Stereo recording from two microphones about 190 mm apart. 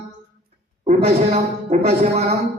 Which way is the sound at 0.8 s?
35° right (ahead or behind).